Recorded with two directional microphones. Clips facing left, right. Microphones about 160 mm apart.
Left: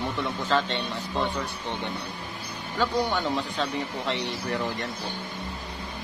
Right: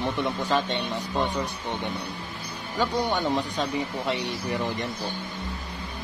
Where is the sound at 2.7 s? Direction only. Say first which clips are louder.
Even; 15° right (ahead or behind).